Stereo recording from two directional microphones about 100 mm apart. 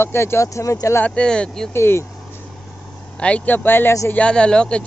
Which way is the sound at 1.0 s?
10° left (ahead or behind).